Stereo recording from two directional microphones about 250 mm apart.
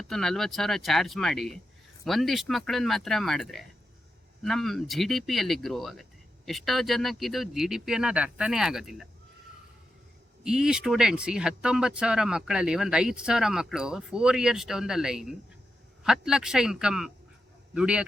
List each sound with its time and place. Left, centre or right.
0.1 s speech: centre
10.4 s speech: centre